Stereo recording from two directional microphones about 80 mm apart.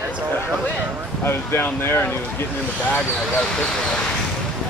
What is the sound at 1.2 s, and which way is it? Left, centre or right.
Speech, left.